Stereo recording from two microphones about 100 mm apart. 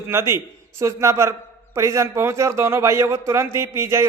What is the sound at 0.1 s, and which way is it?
A man's voice, 25° right (ahead or behind).